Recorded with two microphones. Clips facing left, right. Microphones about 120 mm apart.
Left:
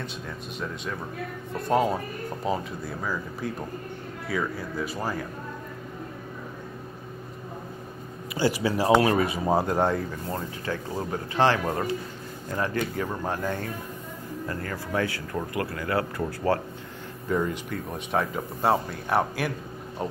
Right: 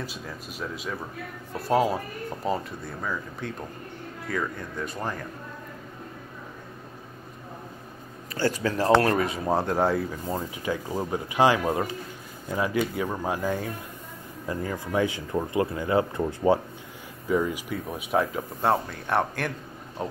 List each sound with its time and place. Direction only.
0.0 s speech: 5° right (ahead or behind)
8.6 s speech: 10° left (ahead or behind)
10.3 s speech: 15° right (ahead or behind)
17.3 s speech: 5° right (ahead or behind)